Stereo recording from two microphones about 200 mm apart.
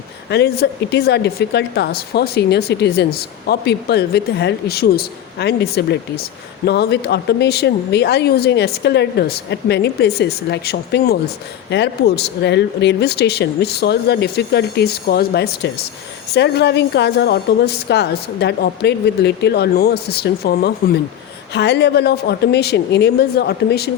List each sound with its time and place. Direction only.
0.3 s speech: 55° left (ahead or behind)